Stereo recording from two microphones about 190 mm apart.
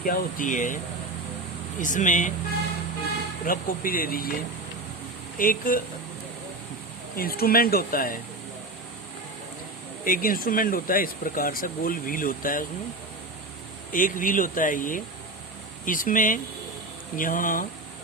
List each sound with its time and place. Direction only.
0.0 s speech: 45° left (ahead or behind)
1.8 s speech: 40° left (ahead or behind)
3.4 s speech: 50° left (ahead or behind)
5.4 s speech: 50° left (ahead or behind)
7.2 s speech: 50° left (ahead or behind)
10.0 s speech: 50° left (ahead or behind)
13.9 s speech: 45° left (ahead or behind)